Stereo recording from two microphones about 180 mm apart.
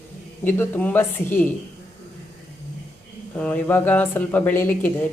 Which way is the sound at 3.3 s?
5° left (ahead or behind).